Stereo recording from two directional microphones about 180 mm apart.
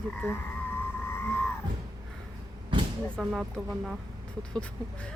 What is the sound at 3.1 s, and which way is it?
Speech, 5° right (ahead or behind).